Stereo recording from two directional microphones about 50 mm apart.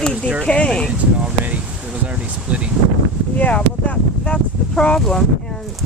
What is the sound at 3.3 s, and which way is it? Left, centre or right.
Speech, left.